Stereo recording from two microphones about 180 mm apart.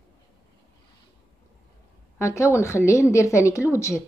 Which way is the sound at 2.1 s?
15° left (ahead or behind).